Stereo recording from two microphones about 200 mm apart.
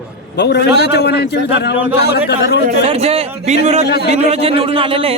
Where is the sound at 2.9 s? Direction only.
30° right (ahead or behind).